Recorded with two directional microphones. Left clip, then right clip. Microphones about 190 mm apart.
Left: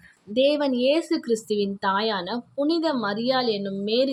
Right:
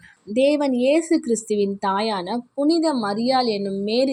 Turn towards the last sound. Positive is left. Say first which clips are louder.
# right 2 dB
turn(degrees=-10)  # may be behind; listen again after turning